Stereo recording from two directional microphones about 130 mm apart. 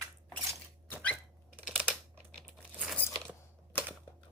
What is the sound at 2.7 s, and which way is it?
Biting, 10° right (ahead or behind).